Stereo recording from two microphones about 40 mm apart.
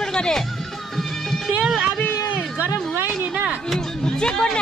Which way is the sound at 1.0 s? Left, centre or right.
Centre.